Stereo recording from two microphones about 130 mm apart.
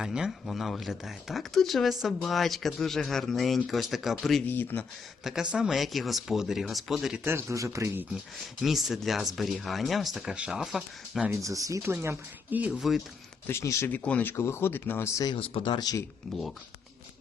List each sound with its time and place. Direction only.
0.0 s speech: 5° right (ahead or behind)
4.4 s speech: 15° left (ahead or behind)
5.2 s speech: 5° right (ahead or behind)
7.3 s speech: 20° right (ahead or behind)
8.6 s speech: centre (ahead or behind)
11.3 s speech: 25° right (ahead or behind)
13.5 s speech: 20° left (ahead or behind)
15.4 s speech: 40° left (ahead or behind)